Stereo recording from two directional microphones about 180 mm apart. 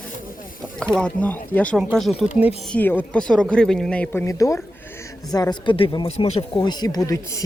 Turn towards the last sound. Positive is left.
turn(degrees=20)  # may be behind; listen again after turning